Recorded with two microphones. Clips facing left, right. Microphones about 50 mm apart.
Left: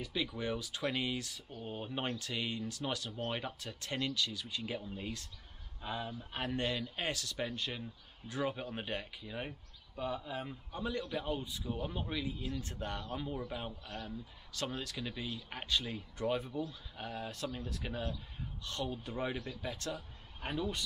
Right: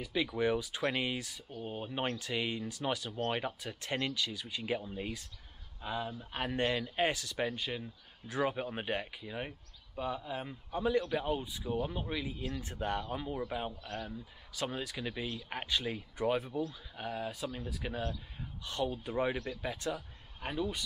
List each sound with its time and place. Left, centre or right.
0.0 s speech: centre
1.3 s speech: centre
2.1 s speech: centre
5.8 s speech: centre
6.5 s speech: right
12.4 s speech: right; by 20.8 s centre